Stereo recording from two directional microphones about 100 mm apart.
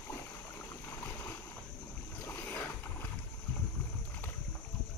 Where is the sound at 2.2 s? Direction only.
20° left (ahead or behind).